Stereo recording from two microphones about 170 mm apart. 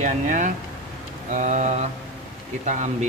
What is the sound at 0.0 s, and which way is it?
Speech, 50° right (ahead or behind).